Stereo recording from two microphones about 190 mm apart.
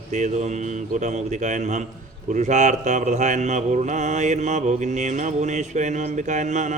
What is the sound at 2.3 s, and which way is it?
Mantra, 40° right (ahead or behind).